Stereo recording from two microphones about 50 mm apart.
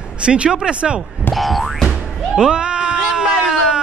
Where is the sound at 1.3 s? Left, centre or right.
Centre.